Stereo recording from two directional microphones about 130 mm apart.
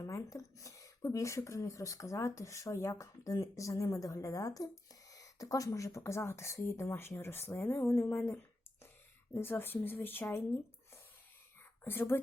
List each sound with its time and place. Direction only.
0.0 s speech: 25° left (ahead or behind)